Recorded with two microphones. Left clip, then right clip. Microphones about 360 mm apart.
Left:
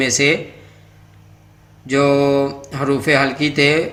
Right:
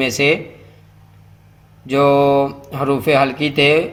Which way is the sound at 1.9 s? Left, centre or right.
Centre.